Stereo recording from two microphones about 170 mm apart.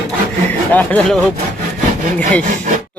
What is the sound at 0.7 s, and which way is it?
Speech, 10° left (ahead or behind).